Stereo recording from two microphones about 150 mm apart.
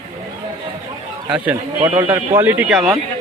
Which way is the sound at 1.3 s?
10° right (ahead or behind).